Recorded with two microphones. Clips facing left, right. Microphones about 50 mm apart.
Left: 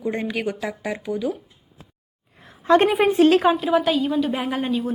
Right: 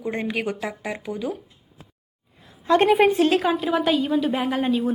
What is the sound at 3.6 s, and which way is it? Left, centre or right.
A woman's voice, centre.